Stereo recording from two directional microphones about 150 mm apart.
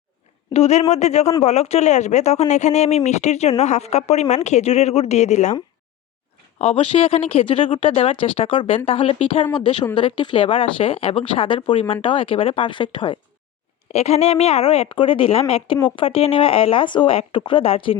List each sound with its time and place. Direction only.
0.5 s speech: 45° left (ahead or behind)
6.6 s a woman's voice: 40° left (ahead or behind)
13.9 s a woman's voice: 45° left (ahead or behind)